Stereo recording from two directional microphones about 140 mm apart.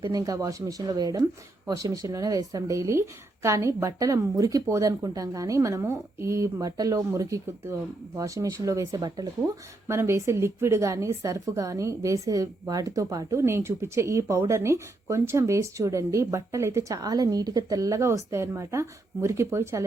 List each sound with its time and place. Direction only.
0.0 s a woman's voice: 25° right (ahead or behind)